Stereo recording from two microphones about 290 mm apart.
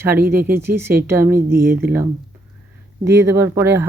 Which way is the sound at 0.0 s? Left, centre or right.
Centre.